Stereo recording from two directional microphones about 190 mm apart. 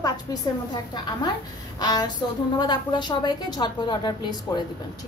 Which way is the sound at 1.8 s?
20° left (ahead or behind).